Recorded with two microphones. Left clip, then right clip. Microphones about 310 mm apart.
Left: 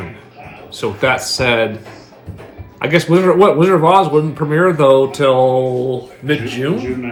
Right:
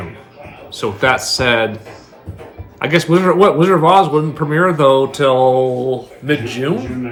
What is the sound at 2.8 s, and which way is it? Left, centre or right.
Speech, centre.